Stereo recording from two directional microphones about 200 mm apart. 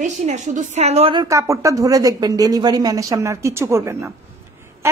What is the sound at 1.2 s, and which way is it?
A woman's voice, 15° right (ahead or behind).